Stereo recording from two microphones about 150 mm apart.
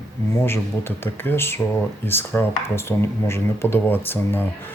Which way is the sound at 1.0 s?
15° left (ahead or behind).